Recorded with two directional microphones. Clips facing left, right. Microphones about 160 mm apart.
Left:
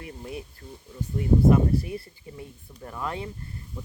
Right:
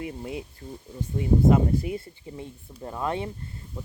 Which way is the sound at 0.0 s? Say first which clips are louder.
Right 4 dB; 20° right (ahead or behind).